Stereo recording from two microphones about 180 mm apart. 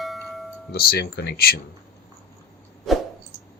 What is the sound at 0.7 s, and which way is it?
Speech, 60° left (ahead or behind).